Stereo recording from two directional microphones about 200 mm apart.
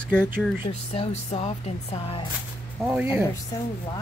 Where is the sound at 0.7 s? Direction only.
30° left (ahead or behind).